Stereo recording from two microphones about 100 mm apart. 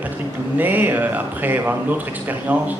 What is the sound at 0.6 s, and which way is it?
Speech, 20° right (ahead or behind).